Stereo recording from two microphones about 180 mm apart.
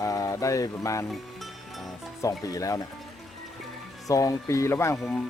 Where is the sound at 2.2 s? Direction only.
20° left (ahead or behind).